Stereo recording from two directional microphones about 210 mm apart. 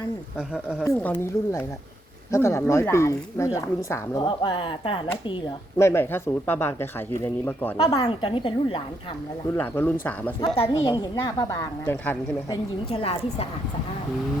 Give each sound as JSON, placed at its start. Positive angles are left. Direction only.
{"t": 0.3, "sound": "speech", "side_deg": -5}
{"t": 0.9, "sound": "speech", "side_deg": 10}
{"t": 5.7, "sound": "a woman's voice", "side_deg": 10}
{"t": 9.6, "sound": "speech", "side_deg": 10}
{"t": 10.5, "sound": "a woman's voice", "side_deg": 25}
{"t": 12.9, "sound": "a woman's voice", "side_deg": 25}